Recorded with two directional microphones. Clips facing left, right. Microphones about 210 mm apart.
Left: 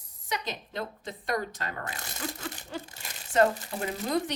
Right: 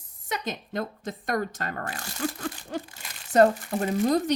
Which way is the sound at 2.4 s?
50° right (ahead or behind).